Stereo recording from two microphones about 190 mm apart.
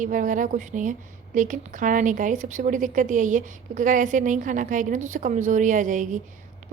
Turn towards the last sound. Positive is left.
turn(degrees=-40)  # may be behind; listen again after turning